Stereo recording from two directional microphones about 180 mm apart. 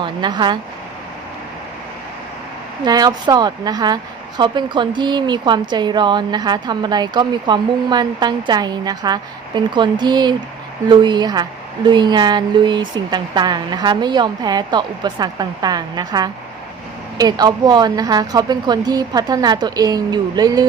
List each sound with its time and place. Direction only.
0.0 s a woman's voice: 25° right (ahead or behind)
2.8 s a woman's voice: 20° right (ahead or behind)